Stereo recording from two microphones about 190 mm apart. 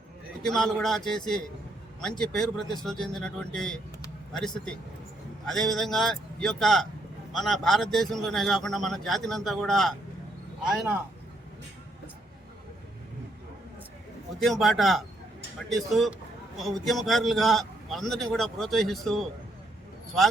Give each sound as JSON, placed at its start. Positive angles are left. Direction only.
{"t": 0.4, "sound": "a man's voice", "side_deg": 0}
{"t": 14.3, "sound": "a man's voice", "side_deg": 0}